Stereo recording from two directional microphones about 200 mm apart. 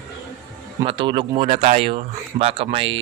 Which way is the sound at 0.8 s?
25° right (ahead or behind).